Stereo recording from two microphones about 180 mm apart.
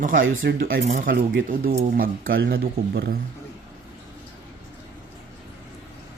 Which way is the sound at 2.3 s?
65° right (ahead or behind).